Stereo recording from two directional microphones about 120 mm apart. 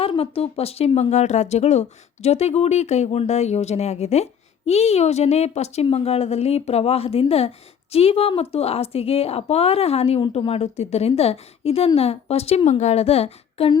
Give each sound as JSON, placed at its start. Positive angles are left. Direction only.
{"t": 0.2, "sound": "speech", "side_deg": 55}
{"t": 1.1, "sound": "speech", "side_deg": 75}